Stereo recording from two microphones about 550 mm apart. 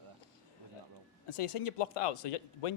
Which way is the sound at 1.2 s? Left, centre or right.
Left.